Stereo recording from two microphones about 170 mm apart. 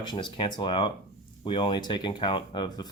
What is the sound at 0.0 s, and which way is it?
Speech, 25° left (ahead or behind).